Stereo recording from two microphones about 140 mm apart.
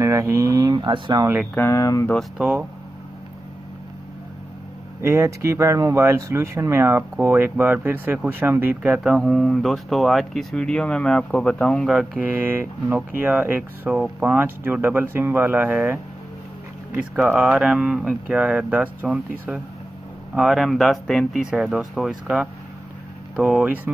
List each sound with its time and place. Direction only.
0.0 s speech: 20° right (ahead or behind)
1.5 s speech: 20° left (ahead or behind)
2.3 s speech: 10° right (ahead or behind)
5.0 s speech: 20° right (ahead or behind); by 12.2 s centre (ahead or behind)
12.2 s speech: 10° right (ahead or behind)
20.3 s speech: centre (ahead or behind)